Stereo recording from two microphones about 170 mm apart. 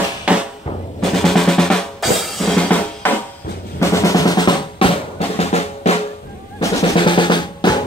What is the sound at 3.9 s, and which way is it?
Drum, 20° left (ahead or behind).